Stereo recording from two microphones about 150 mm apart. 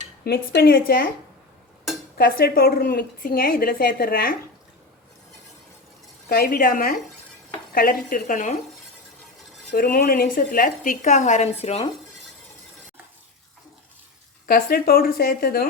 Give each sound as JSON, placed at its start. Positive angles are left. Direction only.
{"t": 0.3, "sound": "speech", "side_deg": 90}
{"t": 2.1, "sound": "a woman's voice", "side_deg": 85}
{"t": 6.2, "sound": "a woman's voice", "side_deg": 80}
{"t": 9.7, "sound": "a woman's voice", "side_deg": 80}
{"t": 14.4, "sound": "speech", "side_deg": 85}